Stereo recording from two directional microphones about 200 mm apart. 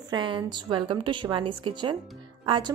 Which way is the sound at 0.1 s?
20° right (ahead or behind).